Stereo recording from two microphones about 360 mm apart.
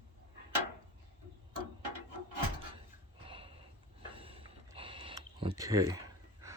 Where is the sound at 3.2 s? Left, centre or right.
Centre.